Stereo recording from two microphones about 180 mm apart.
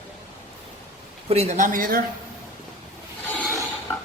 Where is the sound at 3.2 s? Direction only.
10° left (ahead or behind).